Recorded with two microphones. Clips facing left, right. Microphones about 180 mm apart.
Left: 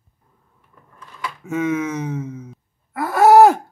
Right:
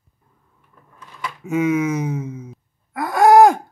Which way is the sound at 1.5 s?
10° right (ahead or behind).